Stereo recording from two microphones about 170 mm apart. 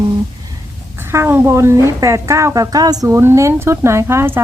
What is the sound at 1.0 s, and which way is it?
A woman's voice, 15° right (ahead or behind).